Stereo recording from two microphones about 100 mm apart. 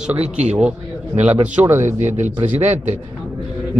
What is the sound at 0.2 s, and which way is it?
Speech, 90° right.